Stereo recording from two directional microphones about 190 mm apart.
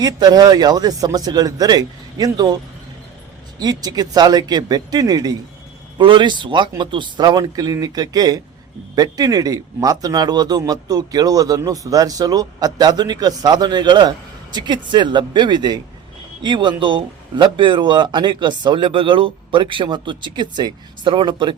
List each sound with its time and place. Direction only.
0.0 s speech: 20° right (ahead or behind)
3.6 s speech: 20° right (ahead or behind)